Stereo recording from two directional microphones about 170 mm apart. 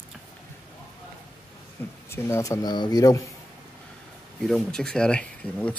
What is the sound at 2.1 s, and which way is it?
Speech, 20° left (ahead or behind).